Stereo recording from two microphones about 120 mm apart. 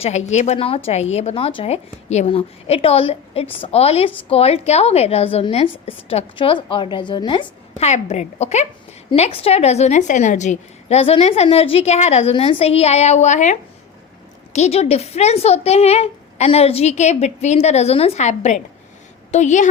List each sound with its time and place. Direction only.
0.0 s a woman's voice: 70° left (ahead or behind); by 7.4 s 40° left (ahead or behind)
7.8 s a woman's voice: 65° left (ahead or behind)
12.3 s a woman's voice: 50° left (ahead or behind); by 13.6 s 85° left
14.5 s a woman's voice: 65° left (ahead or behind)